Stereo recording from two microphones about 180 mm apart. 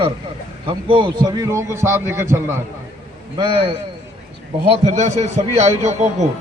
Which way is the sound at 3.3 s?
25° right (ahead or behind).